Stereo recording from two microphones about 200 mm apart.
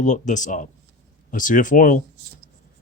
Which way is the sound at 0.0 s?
40° left (ahead or behind).